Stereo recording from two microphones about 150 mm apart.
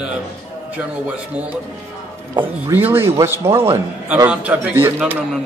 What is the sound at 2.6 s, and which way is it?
A man's voice, 15° right (ahead or behind).